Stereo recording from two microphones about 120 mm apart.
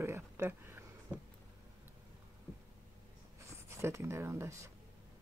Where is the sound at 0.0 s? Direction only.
20° right (ahead or behind).